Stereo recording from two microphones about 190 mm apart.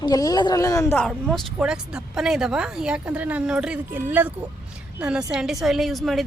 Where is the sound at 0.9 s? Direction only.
Centre (ahead or behind).